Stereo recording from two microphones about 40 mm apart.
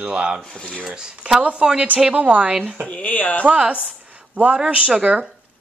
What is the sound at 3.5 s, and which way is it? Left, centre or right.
Speech, right.